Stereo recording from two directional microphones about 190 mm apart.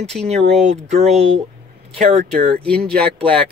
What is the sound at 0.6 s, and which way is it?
Speech, 35° right (ahead or behind).